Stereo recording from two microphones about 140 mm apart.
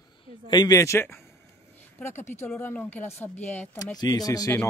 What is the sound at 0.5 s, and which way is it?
Speech, 25° left (ahead or behind).